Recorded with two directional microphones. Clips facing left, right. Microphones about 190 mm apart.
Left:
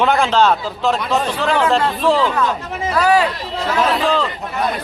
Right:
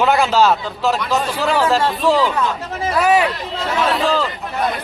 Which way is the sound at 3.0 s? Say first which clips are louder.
Even; 20° right (ahead or behind).